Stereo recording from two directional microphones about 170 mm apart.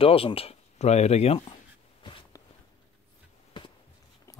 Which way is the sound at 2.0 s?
30° left (ahead or behind).